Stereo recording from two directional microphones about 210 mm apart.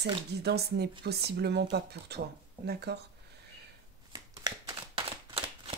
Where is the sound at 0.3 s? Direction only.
50° right (ahead or behind).